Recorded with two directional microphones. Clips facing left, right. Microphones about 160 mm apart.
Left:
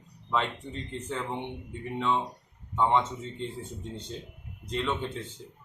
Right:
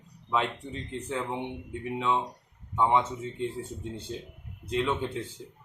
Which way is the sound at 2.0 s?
5° right (ahead or behind).